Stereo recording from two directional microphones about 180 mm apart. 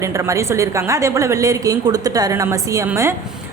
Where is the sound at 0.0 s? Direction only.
15° right (ahead or behind).